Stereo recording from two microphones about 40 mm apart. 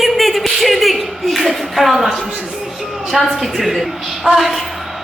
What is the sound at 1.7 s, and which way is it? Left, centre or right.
A man's voice, centre.